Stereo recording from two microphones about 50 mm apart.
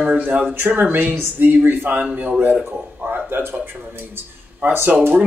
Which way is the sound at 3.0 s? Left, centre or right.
Right.